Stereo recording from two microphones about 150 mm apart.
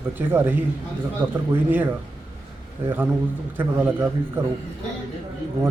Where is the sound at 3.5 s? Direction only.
15° right (ahead or behind).